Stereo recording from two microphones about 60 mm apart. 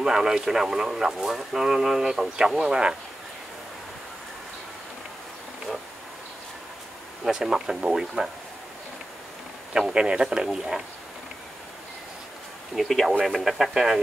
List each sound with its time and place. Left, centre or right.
0.0 s speech: centre
7.2 s speech: centre
9.8 s speech: centre
12.7 s speech: centre